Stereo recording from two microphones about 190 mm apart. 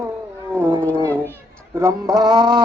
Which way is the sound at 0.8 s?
5° left (ahead or behind).